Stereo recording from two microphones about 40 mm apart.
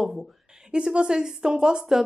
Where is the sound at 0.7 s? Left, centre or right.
Right.